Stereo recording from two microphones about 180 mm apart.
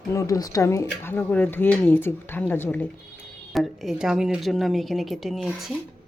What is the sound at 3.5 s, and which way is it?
A woman's voice, centre (ahead or behind).